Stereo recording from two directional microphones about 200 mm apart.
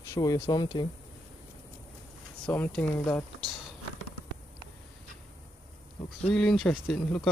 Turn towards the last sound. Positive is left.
turn(degrees=5)  # may be behind; listen again after turning